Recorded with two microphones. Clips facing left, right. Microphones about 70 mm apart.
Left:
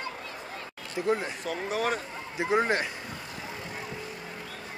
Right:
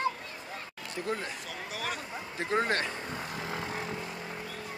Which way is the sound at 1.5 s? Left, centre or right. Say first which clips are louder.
Left 11 dB; left.